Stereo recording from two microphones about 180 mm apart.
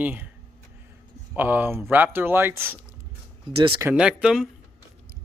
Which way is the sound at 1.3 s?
10° right (ahead or behind).